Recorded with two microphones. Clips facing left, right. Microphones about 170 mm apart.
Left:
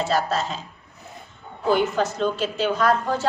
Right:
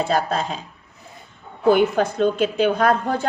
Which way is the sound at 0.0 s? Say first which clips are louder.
Right 2 dB; 55° right (ahead or behind).